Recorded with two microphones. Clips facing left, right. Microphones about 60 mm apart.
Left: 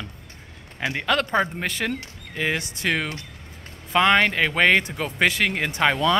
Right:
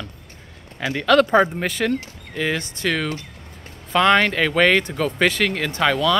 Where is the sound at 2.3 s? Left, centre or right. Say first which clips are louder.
Right 2 dB; centre.